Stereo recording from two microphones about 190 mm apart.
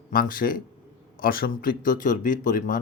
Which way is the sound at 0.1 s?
50° left (ahead or behind).